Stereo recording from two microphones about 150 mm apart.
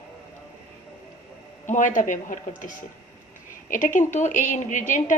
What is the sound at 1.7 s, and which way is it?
A woman's voice, 55° left (ahead or behind).